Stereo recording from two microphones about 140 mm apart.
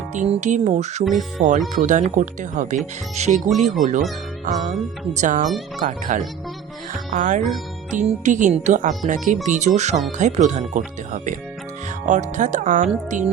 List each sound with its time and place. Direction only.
0.1 s speech: 55° right (ahead or behind)
1.4 s speech: 65° right (ahead or behind)
5.1 s speech: 65° right (ahead or behind)